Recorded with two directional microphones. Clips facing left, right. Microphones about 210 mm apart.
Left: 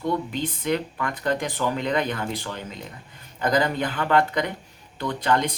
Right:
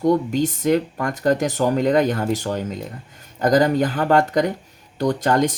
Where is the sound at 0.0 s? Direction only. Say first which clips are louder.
Right 8 dB; 40° right (ahead or behind).